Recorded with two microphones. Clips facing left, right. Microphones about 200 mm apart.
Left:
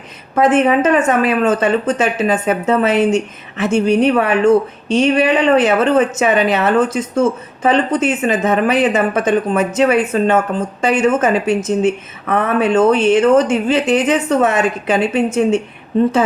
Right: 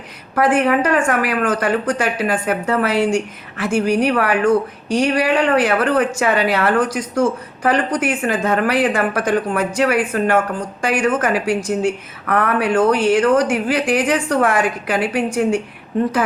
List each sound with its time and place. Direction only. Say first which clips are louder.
0.3 s a woman's voice: left 3 dB; 20° left (ahead or behind)